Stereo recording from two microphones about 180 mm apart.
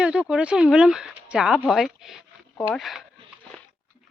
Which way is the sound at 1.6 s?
Centre (ahead or behind).